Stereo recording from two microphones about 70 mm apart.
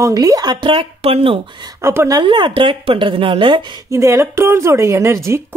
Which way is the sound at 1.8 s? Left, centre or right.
Right.